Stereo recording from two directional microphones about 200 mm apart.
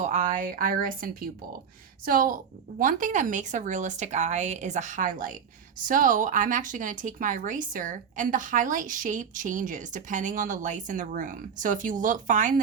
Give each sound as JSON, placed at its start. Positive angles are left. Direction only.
{"t": 0.0, "sound": "a woman's voice", "side_deg": -35}